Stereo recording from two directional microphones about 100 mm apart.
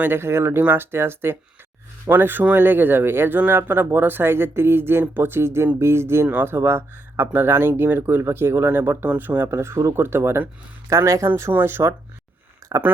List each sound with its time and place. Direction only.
0.0 s speech: 25° right (ahead or behind)